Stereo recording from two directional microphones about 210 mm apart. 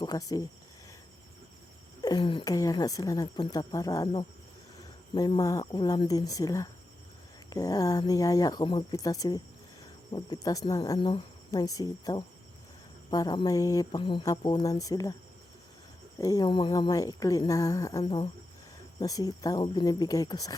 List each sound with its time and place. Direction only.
0.0 s speech: 15° left (ahead or behind)
2.0 s a woman's voice: 20° left (ahead or behind)
16.1 s a woman's voice: 15° left (ahead or behind)
18.0 s a woman's voice: 25° left (ahead or behind)